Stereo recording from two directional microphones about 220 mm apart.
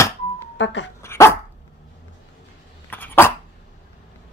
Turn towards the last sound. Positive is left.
turn(degrees=10)  # may be behind; listen again after turning